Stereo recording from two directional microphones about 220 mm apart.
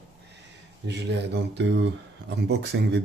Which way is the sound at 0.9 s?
50° right (ahead or behind).